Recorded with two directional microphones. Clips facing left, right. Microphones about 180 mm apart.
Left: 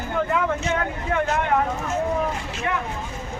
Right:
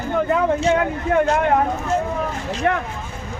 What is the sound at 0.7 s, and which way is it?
Speech, 30° right (ahead or behind).